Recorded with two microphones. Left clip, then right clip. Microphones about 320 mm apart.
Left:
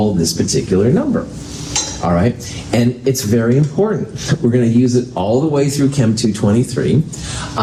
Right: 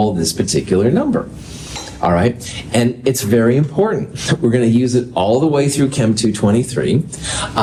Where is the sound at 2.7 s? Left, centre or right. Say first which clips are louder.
Even; right.